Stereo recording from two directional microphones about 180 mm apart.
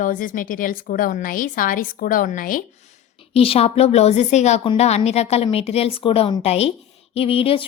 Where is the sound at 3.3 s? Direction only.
30° left (ahead or behind).